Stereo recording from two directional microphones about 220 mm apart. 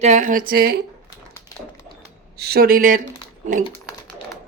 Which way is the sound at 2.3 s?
45° right (ahead or behind).